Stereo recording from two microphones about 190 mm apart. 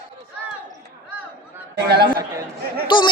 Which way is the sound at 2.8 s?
25° left (ahead or behind).